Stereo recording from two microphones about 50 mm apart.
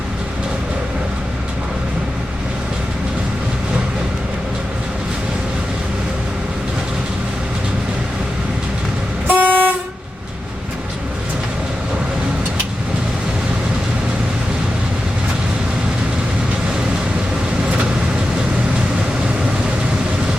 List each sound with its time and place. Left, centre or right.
9.2 s vehicle: right